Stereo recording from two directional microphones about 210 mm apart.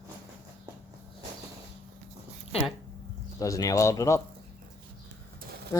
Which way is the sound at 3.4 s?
15° left (ahead or behind).